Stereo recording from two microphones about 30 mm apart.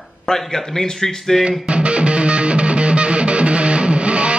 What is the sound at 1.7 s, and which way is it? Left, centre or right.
Music, right.